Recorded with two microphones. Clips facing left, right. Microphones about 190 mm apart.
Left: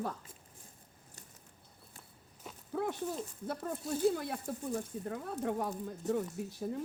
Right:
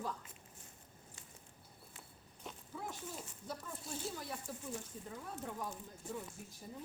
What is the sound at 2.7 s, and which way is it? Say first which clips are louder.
Speech: left 12 dB; 65° left (ahead or behind).